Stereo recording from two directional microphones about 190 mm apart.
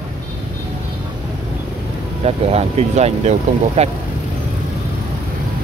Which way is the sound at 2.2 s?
35° right (ahead or behind).